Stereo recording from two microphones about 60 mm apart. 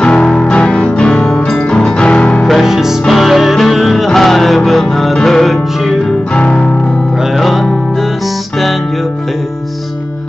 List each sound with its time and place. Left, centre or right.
0.0 s music: centre
2.4 s music: centre
6.3 s music: centre
7.3 s music: centre